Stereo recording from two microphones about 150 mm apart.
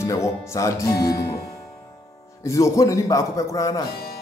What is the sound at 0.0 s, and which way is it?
Speech, 20° left (ahead or behind).